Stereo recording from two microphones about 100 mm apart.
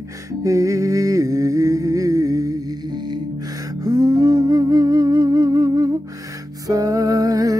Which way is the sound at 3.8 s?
40° right (ahead or behind).